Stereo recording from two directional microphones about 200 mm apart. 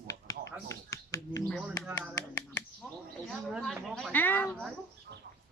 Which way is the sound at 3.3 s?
Centre (ahead or behind).